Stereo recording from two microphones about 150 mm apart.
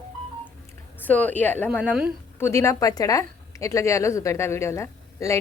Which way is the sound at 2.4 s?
20° left (ahead or behind).